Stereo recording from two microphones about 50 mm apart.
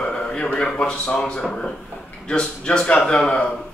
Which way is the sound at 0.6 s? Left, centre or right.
Centre.